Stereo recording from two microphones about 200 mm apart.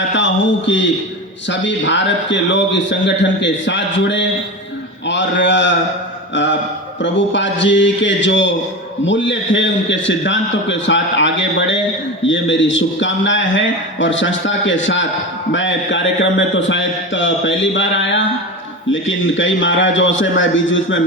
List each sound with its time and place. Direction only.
1.5 s a man's voice: 65° left (ahead or behind)
7.0 s a man's voice: 65° left (ahead or behind)